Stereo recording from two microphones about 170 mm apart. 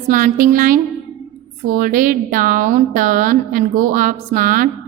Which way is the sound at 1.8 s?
55° right (ahead or behind).